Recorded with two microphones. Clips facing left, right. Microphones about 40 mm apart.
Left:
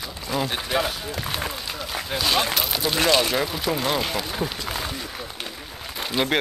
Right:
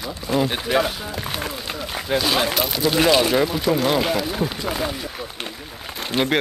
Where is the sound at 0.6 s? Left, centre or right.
Centre.